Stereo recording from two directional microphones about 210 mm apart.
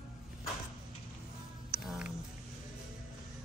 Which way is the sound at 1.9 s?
Centre (ahead or behind).